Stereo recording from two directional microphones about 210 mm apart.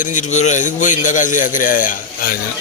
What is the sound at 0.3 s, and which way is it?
Speech, 35° left (ahead or behind).